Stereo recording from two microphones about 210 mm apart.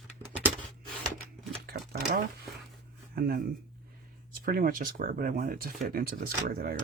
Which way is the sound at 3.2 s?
45° right (ahead or behind).